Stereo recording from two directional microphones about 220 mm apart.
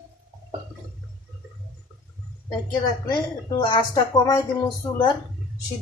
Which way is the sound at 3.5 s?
20° left (ahead or behind).